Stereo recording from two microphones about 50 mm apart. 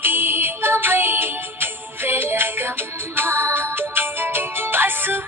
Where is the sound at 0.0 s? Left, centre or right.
Right.